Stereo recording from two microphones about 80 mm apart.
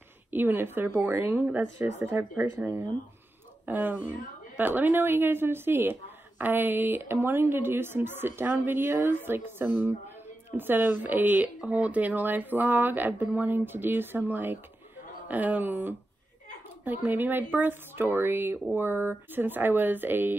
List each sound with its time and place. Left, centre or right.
0.3 s a woman's voice: right
2.0 s speech: right